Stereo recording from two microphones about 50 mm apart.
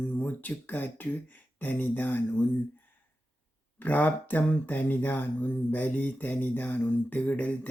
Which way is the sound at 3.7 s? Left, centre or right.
Left.